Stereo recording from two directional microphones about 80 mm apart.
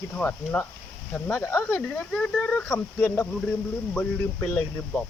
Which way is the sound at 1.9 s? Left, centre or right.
Centre.